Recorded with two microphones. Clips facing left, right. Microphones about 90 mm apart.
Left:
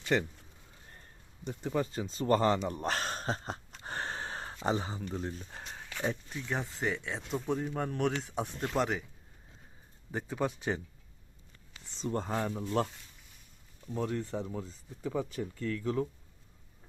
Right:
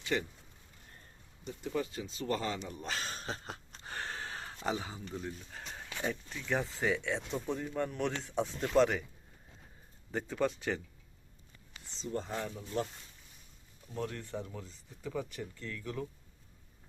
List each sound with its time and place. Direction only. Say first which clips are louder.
0.0 s speech: left 4 dB; 40° left (ahead or behind)
1.5 s speech: left 3 dB; 40° left (ahead or behind)
3.2 s a sound: left 6 dB; 35° left (ahead or behind)
6.5 s speech: right 2 dB; 5° left (ahead or behind)
7.5 s speech: left 7 dB; 25° left (ahead or behind)
7.8 s speech: left 2 dB; 55° left (ahead or behind)
8.7 s a man's voice: right 5 dB; 5° left (ahead or behind)
10.1 s a man's voice: right 1 dB; 15° left (ahead or behind)
11.9 s speech: left 4 dB; 50° left (ahead or behind)
13.9 s speech: left 5 dB; 25° left (ahead or behind)